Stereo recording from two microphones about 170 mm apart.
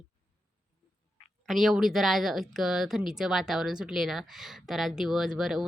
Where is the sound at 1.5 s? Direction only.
Centre (ahead or behind).